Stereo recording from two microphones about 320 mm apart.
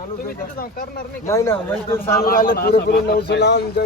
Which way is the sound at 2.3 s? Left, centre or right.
Left.